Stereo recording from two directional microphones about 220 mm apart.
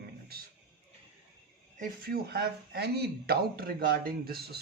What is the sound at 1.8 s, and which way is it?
Speech, 45° right (ahead or behind).